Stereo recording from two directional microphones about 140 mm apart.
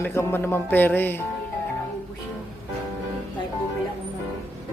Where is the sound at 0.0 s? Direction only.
15° left (ahead or behind).